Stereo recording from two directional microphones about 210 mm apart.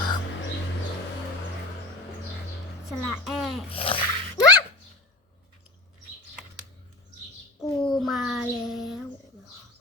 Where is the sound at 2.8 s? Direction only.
Centre (ahead or behind).